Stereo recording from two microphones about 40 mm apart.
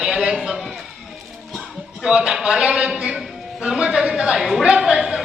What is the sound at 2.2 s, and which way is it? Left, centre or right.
A man's voice, centre.